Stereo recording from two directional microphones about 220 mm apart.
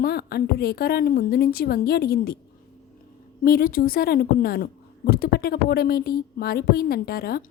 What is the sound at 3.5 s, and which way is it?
A woman's voice, 40° left (ahead or behind).